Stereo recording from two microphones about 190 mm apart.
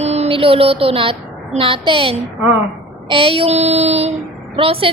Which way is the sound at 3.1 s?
30° right (ahead or behind).